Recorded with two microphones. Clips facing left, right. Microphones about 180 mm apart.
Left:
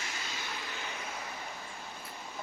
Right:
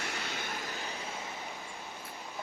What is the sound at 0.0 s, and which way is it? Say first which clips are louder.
Vehicle: right 3 dB; 60° right (ahead or behind).